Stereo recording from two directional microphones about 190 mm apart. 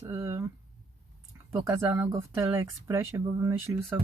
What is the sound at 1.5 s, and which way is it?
Speech, 10° right (ahead or behind).